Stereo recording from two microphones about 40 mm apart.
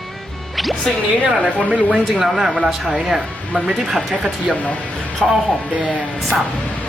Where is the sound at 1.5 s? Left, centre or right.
Centre.